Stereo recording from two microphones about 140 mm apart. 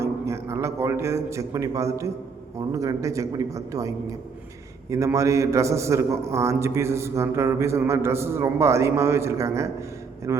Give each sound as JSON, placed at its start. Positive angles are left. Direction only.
{"t": 0.0, "sound": "a man's voice", "side_deg": -20}